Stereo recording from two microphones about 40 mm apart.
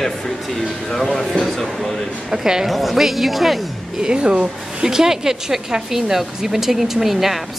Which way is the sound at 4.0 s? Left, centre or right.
Right.